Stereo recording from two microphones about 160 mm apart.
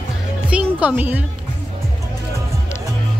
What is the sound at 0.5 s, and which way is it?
Music, 10° right (ahead or behind).